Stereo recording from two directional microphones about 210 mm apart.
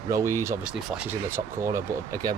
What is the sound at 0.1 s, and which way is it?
Speech, 15° right (ahead or behind).